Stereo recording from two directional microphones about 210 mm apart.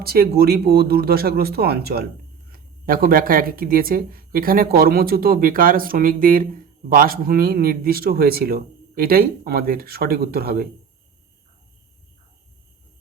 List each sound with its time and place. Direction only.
0.0 s speech: 45° right (ahead or behind)